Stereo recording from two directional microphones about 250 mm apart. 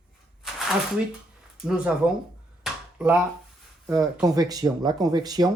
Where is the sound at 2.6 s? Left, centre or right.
Centre.